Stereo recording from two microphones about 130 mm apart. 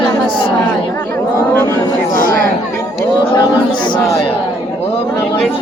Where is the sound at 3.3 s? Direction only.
35° left (ahead or behind).